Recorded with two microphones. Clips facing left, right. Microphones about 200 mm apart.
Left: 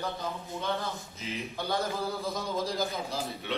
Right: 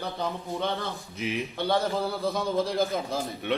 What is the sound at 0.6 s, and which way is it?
Speech, 75° right (ahead or behind).